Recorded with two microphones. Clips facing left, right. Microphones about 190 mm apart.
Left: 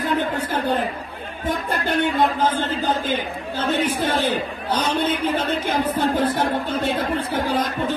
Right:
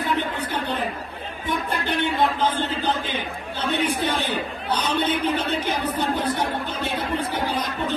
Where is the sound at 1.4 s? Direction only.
45° left (ahead or behind).